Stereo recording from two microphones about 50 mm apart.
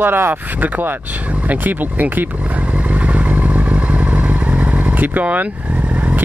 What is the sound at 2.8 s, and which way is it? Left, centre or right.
Vehicle, right.